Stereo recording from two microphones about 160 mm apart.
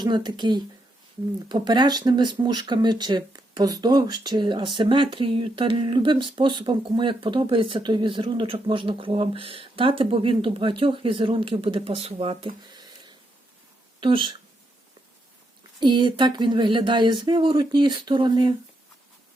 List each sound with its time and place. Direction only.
0.0 s speech: 25° right (ahead or behind)
12.6 s a sound: 25° right (ahead or behind)
14.0 s speech: 35° right (ahead or behind)
15.8 s speech: 30° right (ahead or behind)